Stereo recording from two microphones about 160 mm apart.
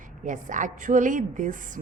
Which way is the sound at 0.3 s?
55° right (ahead or behind).